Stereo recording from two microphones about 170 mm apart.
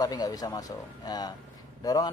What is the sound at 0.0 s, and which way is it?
Speech, 20° left (ahead or behind).